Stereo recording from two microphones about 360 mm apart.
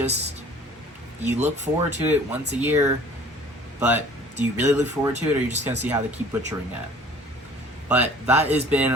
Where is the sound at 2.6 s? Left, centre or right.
Centre.